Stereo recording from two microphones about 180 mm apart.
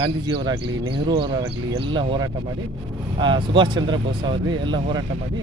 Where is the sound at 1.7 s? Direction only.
30° right (ahead or behind).